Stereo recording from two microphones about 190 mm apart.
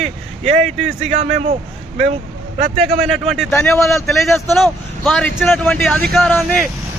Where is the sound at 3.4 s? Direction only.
15° left (ahead or behind).